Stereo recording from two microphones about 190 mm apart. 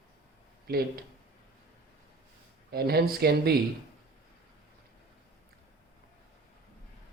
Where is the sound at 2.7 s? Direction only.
55° right (ahead or behind).